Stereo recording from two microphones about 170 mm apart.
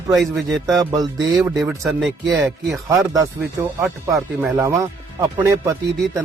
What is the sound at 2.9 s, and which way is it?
Speech, 20° right (ahead or behind).